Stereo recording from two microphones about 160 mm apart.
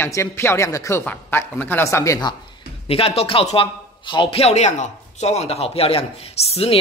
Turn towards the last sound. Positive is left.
turn(degrees=40)  # may be behind; listen again after turning